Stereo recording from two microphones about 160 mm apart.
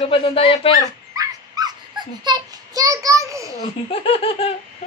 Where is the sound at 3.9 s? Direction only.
35° left (ahead or behind).